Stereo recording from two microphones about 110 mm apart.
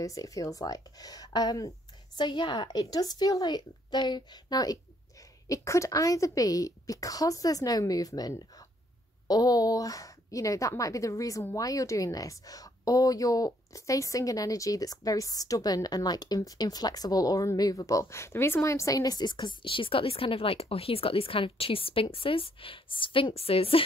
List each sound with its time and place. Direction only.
0.0 s a woman's voice: 30° left (ahead or behind)
2.8 s a woman's voice: 35° left (ahead or behind); by 23.8 s 60° left (ahead or behind)